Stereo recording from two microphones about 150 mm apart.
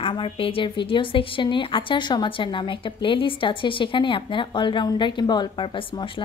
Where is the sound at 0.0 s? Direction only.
35° left (ahead or behind).